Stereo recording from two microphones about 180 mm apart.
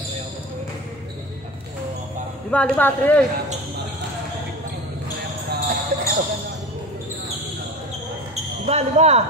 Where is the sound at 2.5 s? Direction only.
10° left (ahead or behind).